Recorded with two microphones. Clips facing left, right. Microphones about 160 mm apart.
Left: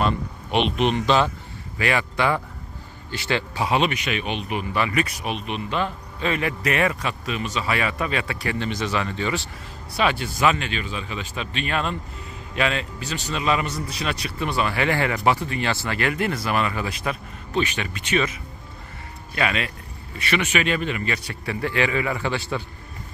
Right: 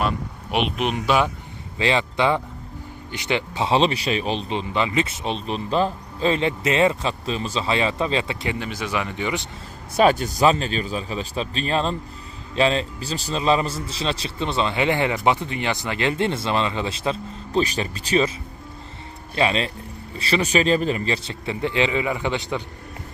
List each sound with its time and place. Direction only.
0.0 s speech: 5° right (ahead or behind)
1.8 s speech: 25° right (ahead or behind)
8.5 s speech: 10° right (ahead or behind)
9.9 s speech: 40° right (ahead or behind)
19.3 s speech: 30° right (ahead or behind)